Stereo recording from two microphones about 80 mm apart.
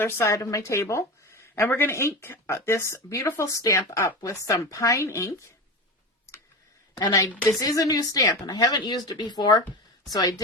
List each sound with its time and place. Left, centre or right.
0.0 s speech: left
7.6 s speech: left
10.1 s speech: left